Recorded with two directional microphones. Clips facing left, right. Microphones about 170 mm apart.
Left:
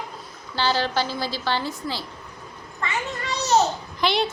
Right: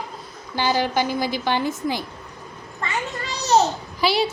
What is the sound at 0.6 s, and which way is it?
A child's voice, 15° right (ahead or behind).